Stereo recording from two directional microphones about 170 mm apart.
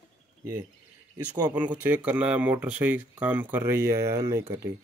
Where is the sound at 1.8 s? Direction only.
10° right (ahead or behind).